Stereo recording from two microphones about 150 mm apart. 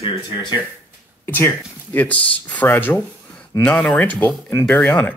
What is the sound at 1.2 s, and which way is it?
Speech, 15° left (ahead or behind).